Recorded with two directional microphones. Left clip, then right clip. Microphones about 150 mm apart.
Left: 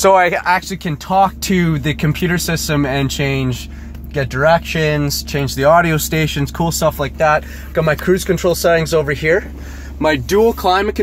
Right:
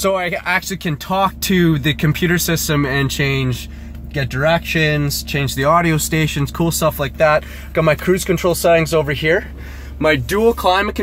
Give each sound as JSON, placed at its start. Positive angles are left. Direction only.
{"t": 0.0, "sound": "speech", "side_deg": -5}
{"t": 7.2, "sound": "speech", "side_deg": -30}